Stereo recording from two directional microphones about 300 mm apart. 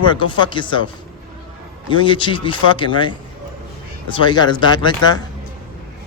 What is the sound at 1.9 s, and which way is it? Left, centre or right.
A man's voice, centre.